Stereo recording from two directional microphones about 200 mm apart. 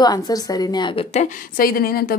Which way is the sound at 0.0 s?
20° left (ahead or behind).